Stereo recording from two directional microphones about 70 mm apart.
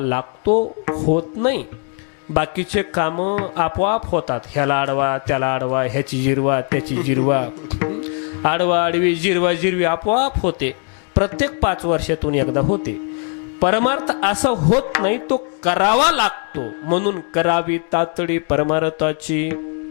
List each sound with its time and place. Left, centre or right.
0.0 s speech: left